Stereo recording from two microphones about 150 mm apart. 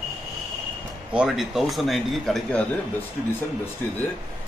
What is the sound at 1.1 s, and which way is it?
A man's voice, 5° right (ahead or behind).